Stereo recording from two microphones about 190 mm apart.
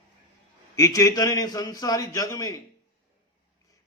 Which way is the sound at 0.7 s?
15° left (ahead or behind).